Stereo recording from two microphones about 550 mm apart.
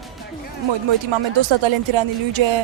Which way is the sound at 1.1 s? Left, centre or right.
Right.